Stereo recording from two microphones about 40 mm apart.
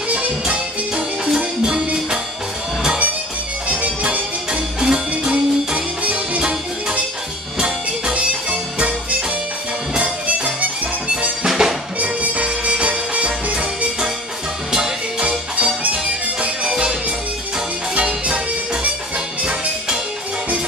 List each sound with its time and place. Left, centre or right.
0.1 s music: right
1.3 s music: centre
3.6 s music: right
4.5 s music: right
7.5 s music: right
9.9 s music: right
11.4 s drum: centre
12.0 s music: right
14.7 s music: right
17.9 s music: right